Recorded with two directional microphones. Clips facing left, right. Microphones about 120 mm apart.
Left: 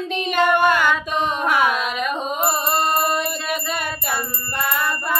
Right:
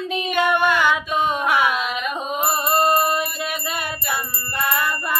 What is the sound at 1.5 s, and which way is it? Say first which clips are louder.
Carnatic music: left 1 dB; 45° left (ahead or behind).